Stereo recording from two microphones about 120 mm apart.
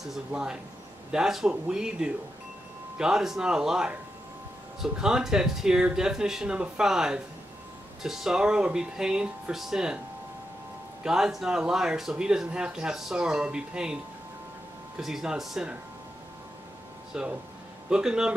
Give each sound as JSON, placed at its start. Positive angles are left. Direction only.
{"t": 0.0, "sound": "speech", "side_deg": -5}
{"t": 11.1, "sound": "speech", "side_deg": -5}
{"t": 15.0, "sound": "speech", "side_deg": -5}
{"t": 17.1, "sound": "speech", "side_deg": -5}